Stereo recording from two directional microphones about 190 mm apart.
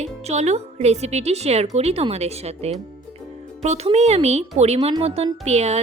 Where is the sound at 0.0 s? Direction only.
35° right (ahead or behind).